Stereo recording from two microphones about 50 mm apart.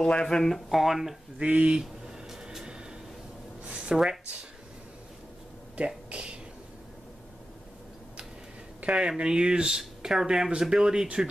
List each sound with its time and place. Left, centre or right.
0.0 s speech: centre
0.7 s speech: centre
1.4 s speech: right
1.8 s a sound: centre
5.8 s speech: right
8.8 s speech: right